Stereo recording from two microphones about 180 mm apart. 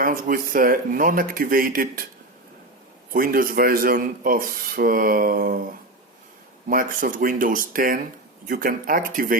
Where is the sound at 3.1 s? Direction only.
50° right (ahead or behind).